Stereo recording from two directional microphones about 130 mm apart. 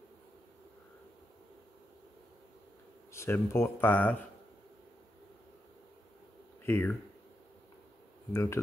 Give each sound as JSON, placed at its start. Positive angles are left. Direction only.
{"t": 3.1, "sound": "speech", "side_deg": 20}
{"t": 6.6, "sound": "speech", "side_deg": 15}
{"t": 8.3, "sound": "speech", "side_deg": 20}